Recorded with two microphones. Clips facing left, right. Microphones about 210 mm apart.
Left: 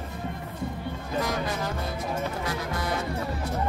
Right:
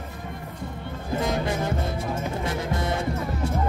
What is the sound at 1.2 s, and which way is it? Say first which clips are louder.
Music: right 3 dB; 25° right (ahead or behind).